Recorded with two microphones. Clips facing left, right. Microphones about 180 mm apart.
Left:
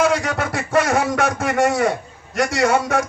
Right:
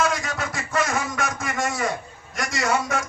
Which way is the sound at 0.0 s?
65° left (ahead or behind).